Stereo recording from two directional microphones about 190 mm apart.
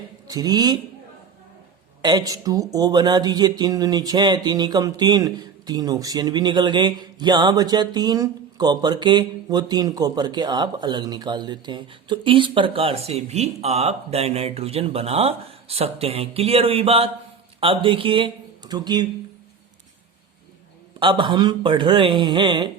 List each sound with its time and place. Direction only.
0.3 s speech: 20° right (ahead or behind)
2.0 s speech: 20° right (ahead or behind)
21.0 s speech: 25° right (ahead or behind)